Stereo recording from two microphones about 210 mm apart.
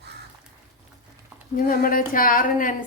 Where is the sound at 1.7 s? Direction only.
40° left (ahead or behind).